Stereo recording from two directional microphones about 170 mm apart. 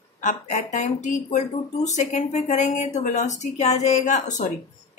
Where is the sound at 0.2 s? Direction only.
45° left (ahead or behind).